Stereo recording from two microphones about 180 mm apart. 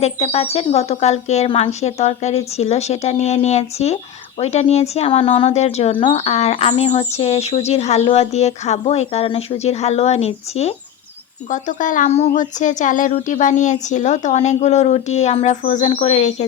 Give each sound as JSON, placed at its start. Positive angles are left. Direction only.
{"t": 0.0, "sound": "speech", "side_deg": 35}